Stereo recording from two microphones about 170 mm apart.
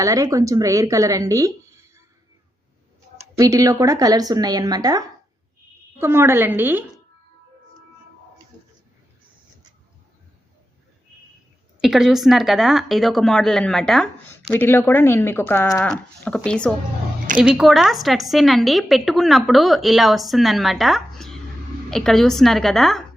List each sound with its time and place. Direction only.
0.0 s speech: 20° right (ahead or behind)
3.2 s a woman's voice: 20° right (ahead or behind)
11.8 s a woman's voice: 5° right (ahead or behind)
17.3 s a woman's voice: 5° right (ahead or behind)